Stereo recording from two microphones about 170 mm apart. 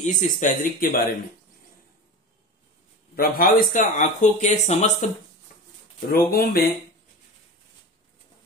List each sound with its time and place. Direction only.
0.0 s speech: 45° left (ahead or behind)
3.2 s speech: 60° left (ahead or behind); by 4.9 s 40° left (ahead or behind)
6.0 s speech: 60° left (ahead or behind)